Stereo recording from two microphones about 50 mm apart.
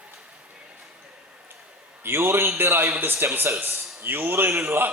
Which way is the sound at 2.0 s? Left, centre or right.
Right.